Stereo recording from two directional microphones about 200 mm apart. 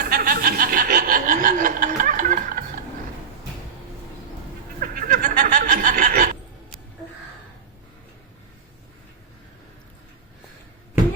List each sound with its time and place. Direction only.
0.0 s chuckle: 50° right (ahead or behind)
4.8 s snicker: 45° right (ahead or behind)